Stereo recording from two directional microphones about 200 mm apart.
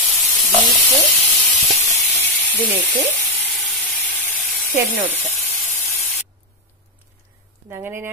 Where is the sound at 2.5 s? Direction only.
10° right (ahead or behind).